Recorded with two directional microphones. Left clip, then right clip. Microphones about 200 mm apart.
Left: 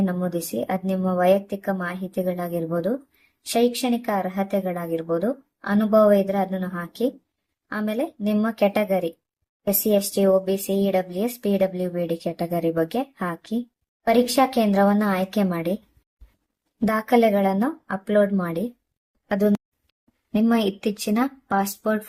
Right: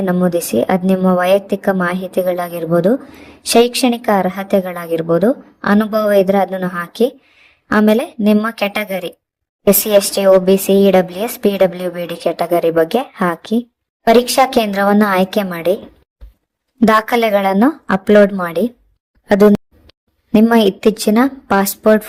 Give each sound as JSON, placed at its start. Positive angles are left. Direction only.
{"t": 0.0, "sound": "speech", "side_deg": -40}
{"t": 16.8, "sound": "speech", "side_deg": -40}